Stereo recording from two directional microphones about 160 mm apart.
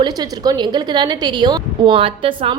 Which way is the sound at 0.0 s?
25° right (ahead or behind).